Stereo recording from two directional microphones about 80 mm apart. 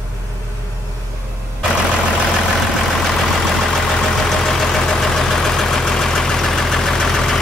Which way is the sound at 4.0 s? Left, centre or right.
Centre.